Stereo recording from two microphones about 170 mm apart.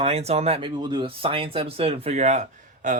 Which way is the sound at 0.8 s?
25° right (ahead or behind).